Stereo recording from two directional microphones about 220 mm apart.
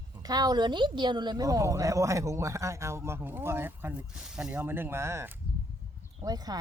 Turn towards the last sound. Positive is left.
turn(degrees=-15)  # may be behind; listen again after turning